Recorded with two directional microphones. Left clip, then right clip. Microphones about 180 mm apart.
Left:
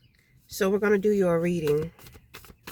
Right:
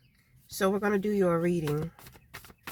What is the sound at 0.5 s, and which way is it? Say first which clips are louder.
Speech: left 4 dB; 15° left (ahead or behind).